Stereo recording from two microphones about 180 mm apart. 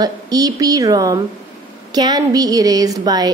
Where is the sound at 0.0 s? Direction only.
20° right (ahead or behind).